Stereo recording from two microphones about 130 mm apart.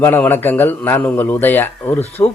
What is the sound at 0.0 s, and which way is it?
A man's voice, 15° left (ahead or behind).